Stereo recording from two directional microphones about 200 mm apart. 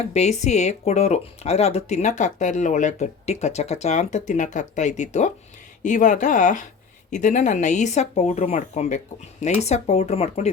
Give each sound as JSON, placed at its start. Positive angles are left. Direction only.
{"t": 0.0, "sound": "speech", "side_deg": 35}